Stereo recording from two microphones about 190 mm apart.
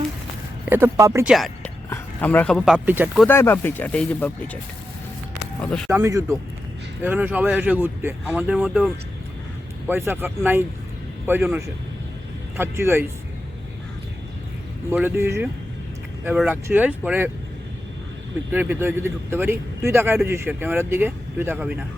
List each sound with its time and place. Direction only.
0.7 s a man's voice: 15° right (ahead or behind)
1.2 s speech: centre (ahead or behind)
1.9 s speech: 10° left (ahead or behind); by 3.1 s 10° right (ahead or behind)
3.2 s speech: 10° left (ahead or behind)
5.5 s speech: 5° left (ahead or behind)
5.9 s a man's voice: 15° right (ahead or behind)
14.8 s a man's voice: 10° right (ahead or behind)
18.5 s a man's voice: 10° right (ahead or behind)